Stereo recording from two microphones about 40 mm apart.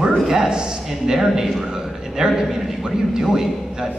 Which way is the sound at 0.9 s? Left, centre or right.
Centre.